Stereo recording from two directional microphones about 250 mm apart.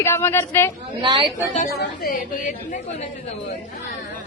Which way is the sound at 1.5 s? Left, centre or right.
Left.